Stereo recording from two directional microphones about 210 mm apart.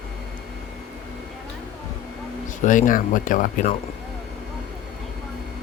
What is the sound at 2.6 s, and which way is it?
Speech, 40° left (ahead or behind).